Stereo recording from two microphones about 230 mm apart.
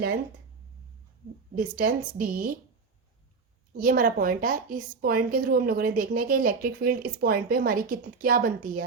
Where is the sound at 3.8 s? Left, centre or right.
Right.